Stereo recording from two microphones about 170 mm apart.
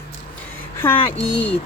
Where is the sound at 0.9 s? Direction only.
35° left (ahead or behind).